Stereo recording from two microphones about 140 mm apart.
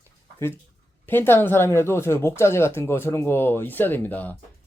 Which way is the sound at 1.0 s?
15° left (ahead or behind).